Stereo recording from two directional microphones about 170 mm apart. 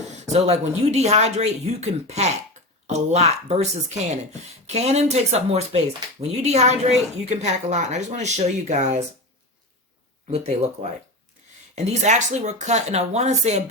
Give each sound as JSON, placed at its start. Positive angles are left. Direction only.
{"t": 0.3, "sound": "a woman's voice", "side_deg": -40}
{"t": 10.3, "sound": "a woman's voice", "side_deg": -40}
{"t": 11.7, "sound": "a woman's voice", "side_deg": -40}